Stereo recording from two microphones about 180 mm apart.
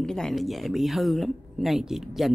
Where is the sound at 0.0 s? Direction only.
5° left (ahead or behind).